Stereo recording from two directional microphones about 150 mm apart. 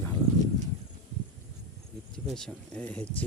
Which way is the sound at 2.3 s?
5° left (ahead or behind).